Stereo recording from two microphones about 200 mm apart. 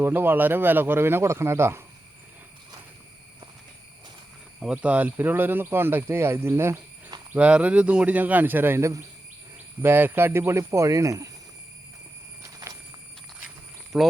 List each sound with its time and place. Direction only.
0.0 s speech: 10° right (ahead or behind)
4.6 s speech: 5° right (ahead or behind)
12.7 s horse: 15° right (ahead or behind)
13.9 s speech: 5° right (ahead or behind)